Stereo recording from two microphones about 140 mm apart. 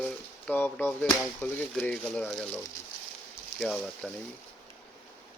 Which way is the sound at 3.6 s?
5° left (ahead or behind).